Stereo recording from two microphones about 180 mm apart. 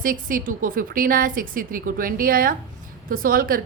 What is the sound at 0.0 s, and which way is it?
A woman's voice, 50° right (ahead or behind).